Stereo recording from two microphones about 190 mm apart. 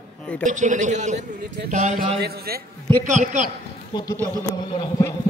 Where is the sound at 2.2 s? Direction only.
55° right (ahead or behind).